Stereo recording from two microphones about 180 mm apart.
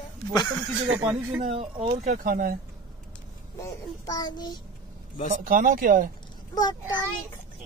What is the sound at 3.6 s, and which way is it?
Child singing, 20° left (ahead or behind).